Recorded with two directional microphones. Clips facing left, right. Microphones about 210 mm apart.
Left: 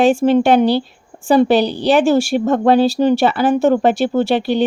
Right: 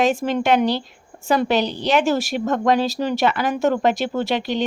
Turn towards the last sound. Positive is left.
turn(degrees=35)  # may be behind; listen again after turning